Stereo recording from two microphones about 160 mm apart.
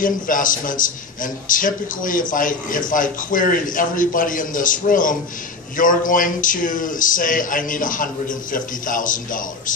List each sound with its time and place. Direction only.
0.0 s speech: 55° left (ahead or behind)